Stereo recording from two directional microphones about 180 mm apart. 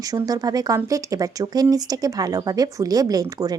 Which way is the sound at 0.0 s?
20° right (ahead or behind).